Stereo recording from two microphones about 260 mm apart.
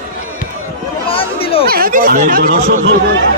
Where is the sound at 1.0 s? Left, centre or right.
Left.